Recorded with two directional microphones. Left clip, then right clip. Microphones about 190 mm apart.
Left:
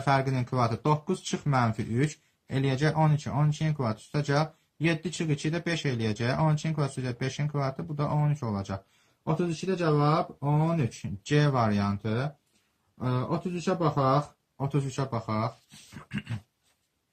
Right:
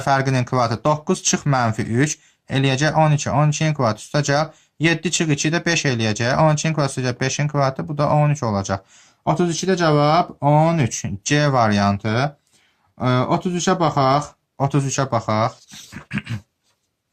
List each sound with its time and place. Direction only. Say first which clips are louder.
0.0 s speech: right 8 dB; 30° right (ahead or behind)
9.2 s speech: right 11 dB; 45° right (ahead or behind)
13.0 s speech: right 12 dB; 45° right (ahead or behind)
14.6 s speech: right 11 dB; 35° right (ahead or behind)
16.0 s dog: right 10 dB; 30° right (ahead or behind)